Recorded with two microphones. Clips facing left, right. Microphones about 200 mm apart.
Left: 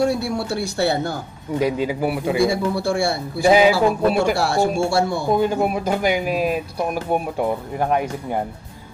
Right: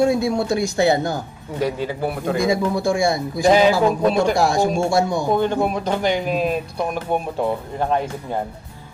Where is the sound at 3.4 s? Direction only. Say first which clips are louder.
Even; 10° left (ahead or behind).